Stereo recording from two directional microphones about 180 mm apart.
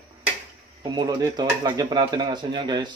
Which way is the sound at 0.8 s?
25° right (ahead or behind).